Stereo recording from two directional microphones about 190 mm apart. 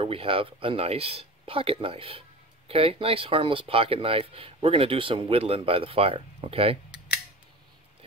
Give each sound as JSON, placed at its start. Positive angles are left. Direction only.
{"t": 0.0, "sound": "speech", "side_deg": -30}